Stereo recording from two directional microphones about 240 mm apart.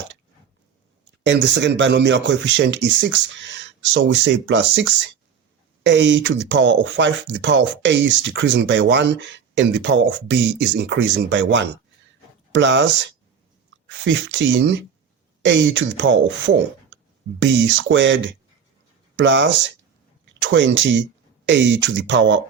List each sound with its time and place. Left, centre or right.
1.2 s speech: right